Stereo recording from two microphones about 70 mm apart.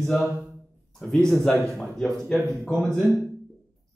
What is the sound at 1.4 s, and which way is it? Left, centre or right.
A man's voice, centre.